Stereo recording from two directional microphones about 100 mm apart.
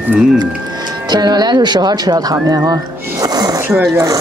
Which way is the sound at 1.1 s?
45° right (ahead or behind).